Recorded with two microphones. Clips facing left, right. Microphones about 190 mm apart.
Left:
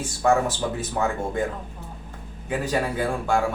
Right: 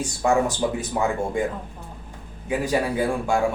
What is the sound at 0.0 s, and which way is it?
Speech, 15° right (ahead or behind).